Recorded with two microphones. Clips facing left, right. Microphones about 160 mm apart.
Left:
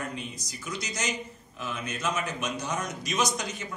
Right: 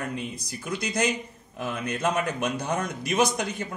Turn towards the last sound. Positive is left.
turn(degrees=-55)  # may be behind; listen again after turning